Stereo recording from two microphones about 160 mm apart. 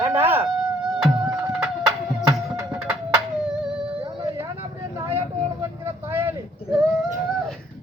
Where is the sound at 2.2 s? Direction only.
20° right (ahead or behind).